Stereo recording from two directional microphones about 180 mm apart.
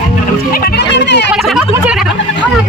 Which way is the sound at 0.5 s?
60° left (ahead or behind).